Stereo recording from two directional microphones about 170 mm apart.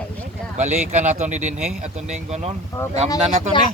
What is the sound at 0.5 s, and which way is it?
Speech, 40° right (ahead or behind).